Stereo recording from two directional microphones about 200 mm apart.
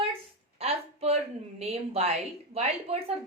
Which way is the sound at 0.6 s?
30° right (ahead or behind).